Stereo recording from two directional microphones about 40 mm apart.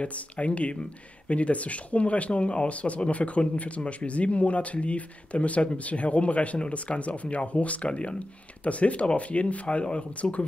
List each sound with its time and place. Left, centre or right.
0.0 s speech: left